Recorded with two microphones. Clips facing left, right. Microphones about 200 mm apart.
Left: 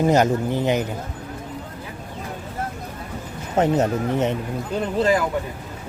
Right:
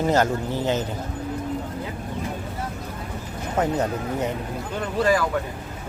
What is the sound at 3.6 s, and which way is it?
Speech, 25° left (ahead or behind).